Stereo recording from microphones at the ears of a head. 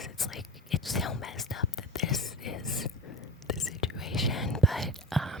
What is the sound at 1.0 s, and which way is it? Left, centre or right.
Whispering, left.